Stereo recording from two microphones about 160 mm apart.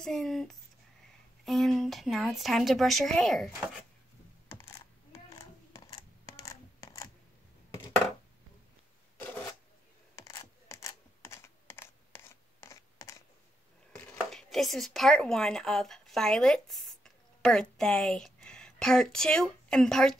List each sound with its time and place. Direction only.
0.0 s a woman's voice: 5° left (ahead or behind)
4.5 s computer keyboard: 15° left (ahead or behind)
5.9 s a sound: 20° left (ahead or behind)
10.1 s computer keyboard: 20° left (ahead or behind)
14.3 s a woman's voice: centre (ahead or behind)